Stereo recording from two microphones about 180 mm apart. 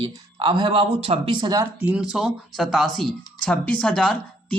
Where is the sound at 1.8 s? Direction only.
5° right (ahead or behind).